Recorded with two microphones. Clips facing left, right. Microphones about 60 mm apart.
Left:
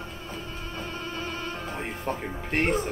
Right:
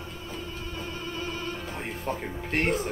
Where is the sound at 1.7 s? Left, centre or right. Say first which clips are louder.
Left 2 dB; centre.